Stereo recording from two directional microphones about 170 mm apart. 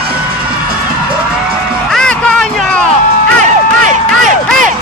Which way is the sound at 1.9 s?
5° left (ahead or behind).